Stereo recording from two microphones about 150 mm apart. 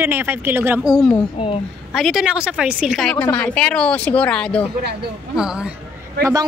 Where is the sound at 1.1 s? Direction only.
35° left (ahead or behind).